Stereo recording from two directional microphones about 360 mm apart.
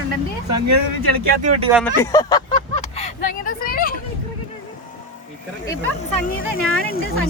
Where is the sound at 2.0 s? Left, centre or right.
Centre.